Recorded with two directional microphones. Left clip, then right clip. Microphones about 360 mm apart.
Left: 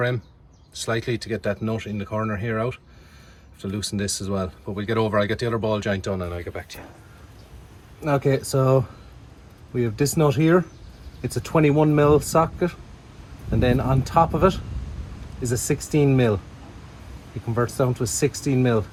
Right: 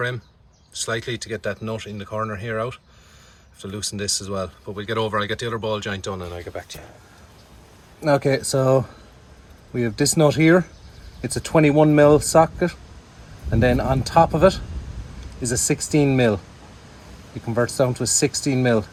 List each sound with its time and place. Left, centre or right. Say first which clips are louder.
0.7 s speech: even; centre
8.0 s speech: right 3 dB; right
10.0 s speech: right 4 dB; right
17.5 s speech: right 3 dB; right